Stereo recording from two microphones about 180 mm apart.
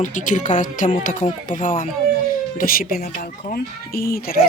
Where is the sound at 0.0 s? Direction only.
45° left (ahead or behind).